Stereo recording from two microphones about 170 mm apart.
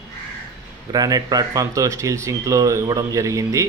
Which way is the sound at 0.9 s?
20° right (ahead or behind).